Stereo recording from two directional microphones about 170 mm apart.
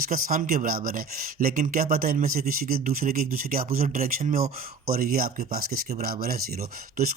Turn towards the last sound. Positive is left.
turn(degrees=-60)  # may be behind; listen again after turning